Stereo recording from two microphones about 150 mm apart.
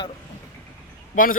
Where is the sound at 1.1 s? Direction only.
65° left (ahead or behind).